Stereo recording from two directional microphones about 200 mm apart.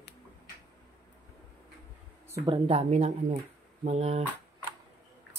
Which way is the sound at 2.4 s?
30° right (ahead or behind).